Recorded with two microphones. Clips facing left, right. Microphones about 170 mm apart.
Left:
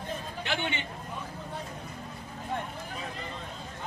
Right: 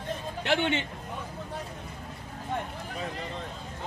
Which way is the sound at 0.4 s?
65° right (ahead or behind).